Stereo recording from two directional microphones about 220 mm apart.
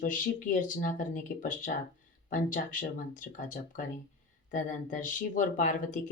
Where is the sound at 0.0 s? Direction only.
35° left (ahead or behind).